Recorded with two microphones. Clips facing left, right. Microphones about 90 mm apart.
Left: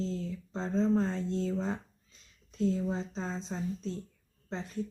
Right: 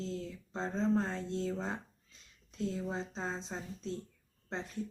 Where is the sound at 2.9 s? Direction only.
20° right (ahead or behind).